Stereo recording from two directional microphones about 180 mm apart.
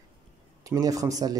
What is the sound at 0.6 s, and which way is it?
Speech, 20° right (ahead or behind).